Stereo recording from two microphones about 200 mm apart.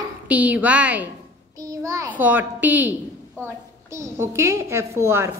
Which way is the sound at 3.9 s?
15° right (ahead or behind).